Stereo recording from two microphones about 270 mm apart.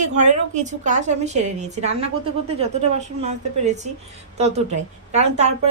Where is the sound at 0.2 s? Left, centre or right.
Right.